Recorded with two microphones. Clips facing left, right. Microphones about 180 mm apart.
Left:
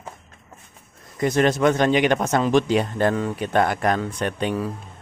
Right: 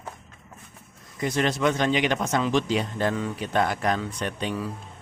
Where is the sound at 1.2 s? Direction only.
50° left (ahead or behind).